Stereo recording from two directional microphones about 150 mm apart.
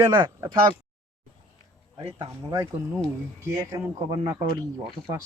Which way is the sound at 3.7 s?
20° right (ahead or behind).